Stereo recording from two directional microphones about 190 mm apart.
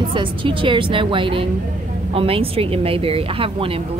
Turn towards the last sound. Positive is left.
turn(degrees=-30)  # may be behind; listen again after turning